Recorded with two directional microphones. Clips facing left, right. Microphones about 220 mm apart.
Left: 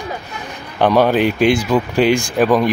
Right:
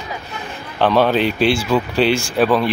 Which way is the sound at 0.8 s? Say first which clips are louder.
Left 2 dB; 10° left (ahead or behind).